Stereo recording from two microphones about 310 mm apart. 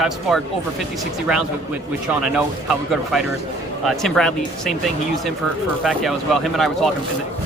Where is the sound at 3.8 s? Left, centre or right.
Centre.